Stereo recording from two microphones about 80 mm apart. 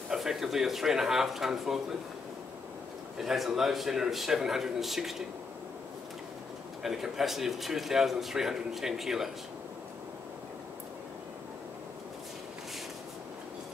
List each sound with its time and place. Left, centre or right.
0.1 s a man's voice: centre
3.2 s a man's voice: centre
6.8 s a man's voice: centre